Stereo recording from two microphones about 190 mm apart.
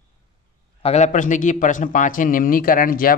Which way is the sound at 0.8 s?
35° left (ahead or behind).